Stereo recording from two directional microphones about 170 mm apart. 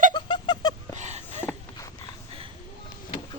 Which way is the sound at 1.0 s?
40° right (ahead or behind).